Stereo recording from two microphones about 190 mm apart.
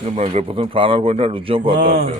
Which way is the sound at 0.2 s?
35° right (ahead or behind).